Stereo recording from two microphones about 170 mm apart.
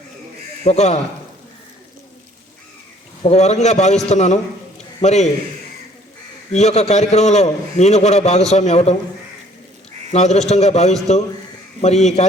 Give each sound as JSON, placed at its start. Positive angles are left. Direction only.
{"t": 0.6, "sound": "a man's voice", "side_deg": 40}
{"t": 3.2, "sound": "a man's voice", "side_deg": 40}
{"t": 6.5, "sound": "a man's voice", "side_deg": 40}
{"t": 10.1, "sound": "a man's voice", "side_deg": 40}